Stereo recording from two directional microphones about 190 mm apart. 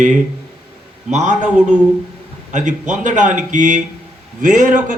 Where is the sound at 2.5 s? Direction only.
40° right (ahead or behind).